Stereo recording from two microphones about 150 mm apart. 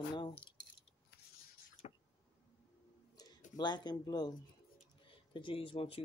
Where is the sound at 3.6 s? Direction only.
30° left (ahead or behind).